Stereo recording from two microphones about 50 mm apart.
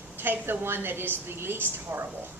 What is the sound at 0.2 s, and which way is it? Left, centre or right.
A woman's voice, right.